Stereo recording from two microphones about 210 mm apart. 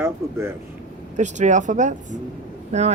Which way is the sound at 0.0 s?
10° right (ahead or behind).